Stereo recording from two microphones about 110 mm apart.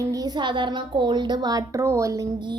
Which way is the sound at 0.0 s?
35° right (ahead or behind).